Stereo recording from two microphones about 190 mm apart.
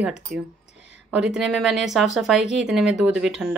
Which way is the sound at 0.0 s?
5° right (ahead or behind).